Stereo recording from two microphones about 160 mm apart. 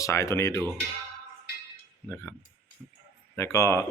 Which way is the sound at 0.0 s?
20° left (ahead or behind).